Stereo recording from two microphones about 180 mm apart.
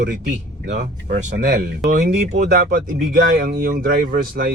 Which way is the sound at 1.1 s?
55° right (ahead or behind).